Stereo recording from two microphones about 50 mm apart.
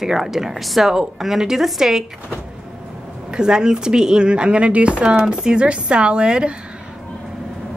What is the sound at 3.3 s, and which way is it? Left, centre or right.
Speech, centre.